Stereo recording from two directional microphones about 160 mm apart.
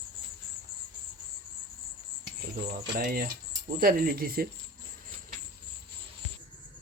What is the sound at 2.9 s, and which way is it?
Speech, 70° right (ahead or behind).